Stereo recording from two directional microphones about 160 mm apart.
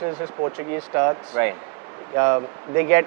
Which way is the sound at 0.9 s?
15° right (ahead or behind).